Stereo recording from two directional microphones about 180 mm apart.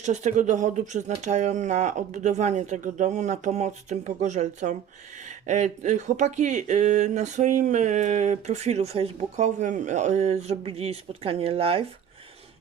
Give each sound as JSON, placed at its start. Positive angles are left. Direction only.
{"t": 0.0, "sound": "speech", "side_deg": -40}